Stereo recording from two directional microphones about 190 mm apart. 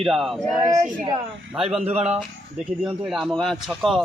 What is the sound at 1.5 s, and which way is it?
Speech, centre (ahead or behind).